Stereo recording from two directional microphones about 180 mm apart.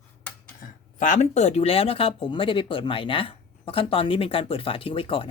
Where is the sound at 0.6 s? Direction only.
45° left (ahead or behind).